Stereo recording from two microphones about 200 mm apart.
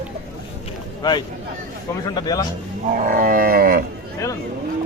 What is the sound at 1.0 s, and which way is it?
A man's voice, 20° left (ahead or behind).